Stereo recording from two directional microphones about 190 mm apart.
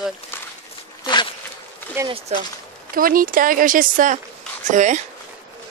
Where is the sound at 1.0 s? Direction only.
25° left (ahead or behind).